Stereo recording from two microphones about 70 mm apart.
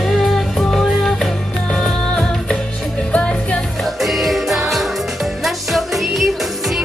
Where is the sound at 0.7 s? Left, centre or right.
Centre.